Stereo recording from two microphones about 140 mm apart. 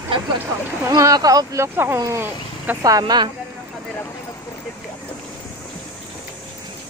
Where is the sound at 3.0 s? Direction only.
30° right (ahead or behind).